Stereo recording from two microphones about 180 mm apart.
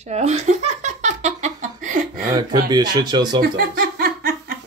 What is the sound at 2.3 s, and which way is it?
Speech, 25° right (ahead or behind).